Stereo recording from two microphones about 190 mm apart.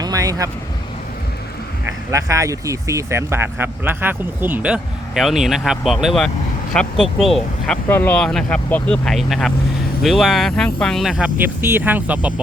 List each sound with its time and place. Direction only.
0.0 s speech: 20° right (ahead or behind)
2.0 s speech: 15° right (ahead or behind)